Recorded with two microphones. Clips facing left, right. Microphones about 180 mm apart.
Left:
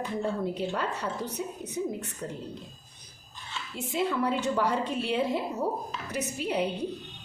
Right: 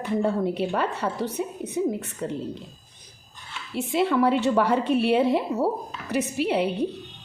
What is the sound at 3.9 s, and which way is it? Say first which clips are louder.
A woman's voice: right 7 dB; 70° right (ahead or behind).